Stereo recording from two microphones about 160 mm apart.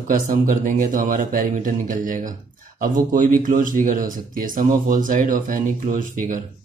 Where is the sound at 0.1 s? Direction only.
55° right (ahead or behind).